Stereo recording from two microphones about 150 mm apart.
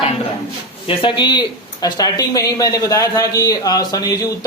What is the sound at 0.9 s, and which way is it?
A man's voice, 35° left (ahead or behind).